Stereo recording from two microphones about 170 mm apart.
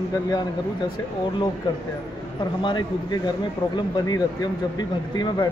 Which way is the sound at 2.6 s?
25° left (ahead or behind).